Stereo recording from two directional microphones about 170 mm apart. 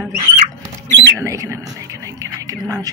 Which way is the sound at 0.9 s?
20° right (ahead or behind).